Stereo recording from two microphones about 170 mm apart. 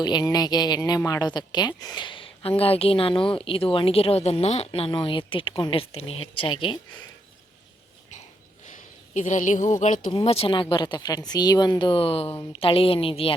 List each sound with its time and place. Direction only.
0.0 s a woman's voice: 25° left (ahead or behind)
8.6 s speech: 45° left (ahead or behind)
10.1 s a woman's voice: 30° left (ahead or behind)